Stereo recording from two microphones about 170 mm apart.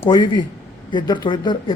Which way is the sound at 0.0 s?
25° left (ahead or behind).